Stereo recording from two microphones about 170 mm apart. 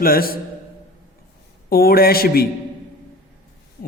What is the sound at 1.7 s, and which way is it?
Speech, 60° left (ahead or behind).